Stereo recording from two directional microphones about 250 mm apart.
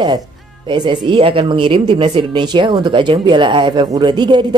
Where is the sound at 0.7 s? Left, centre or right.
Centre.